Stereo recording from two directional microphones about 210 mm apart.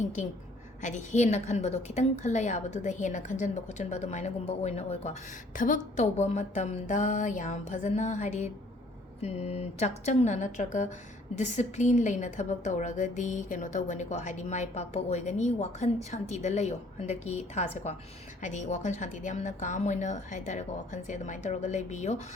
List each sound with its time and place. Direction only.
0.8 s a woman's voice: 35° left (ahead or behind)